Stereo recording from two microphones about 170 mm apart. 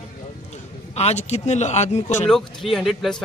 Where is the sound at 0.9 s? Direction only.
40° left (ahead or behind).